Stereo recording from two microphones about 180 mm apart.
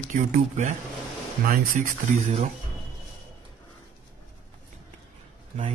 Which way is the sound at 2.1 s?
35° right (ahead or behind).